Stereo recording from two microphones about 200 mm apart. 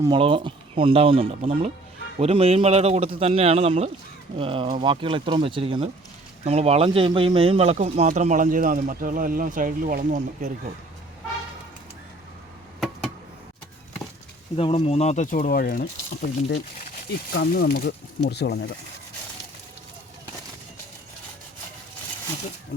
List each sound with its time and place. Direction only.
0.0 s a man's voice: 25° right (ahead or behind); by 10.5 s 40° right (ahead or behind)
14.5 s speech: 30° left (ahead or behind); by 15.9 s 50° left (ahead or behind)
17.3 s speech: 55° left (ahead or behind)